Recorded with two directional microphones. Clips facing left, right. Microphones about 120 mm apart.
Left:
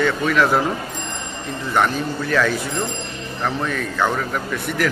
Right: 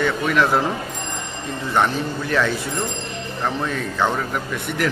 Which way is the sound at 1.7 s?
20° right (ahead or behind).